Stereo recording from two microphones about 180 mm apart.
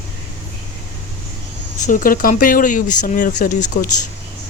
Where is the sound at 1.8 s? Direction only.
50° left (ahead or behind).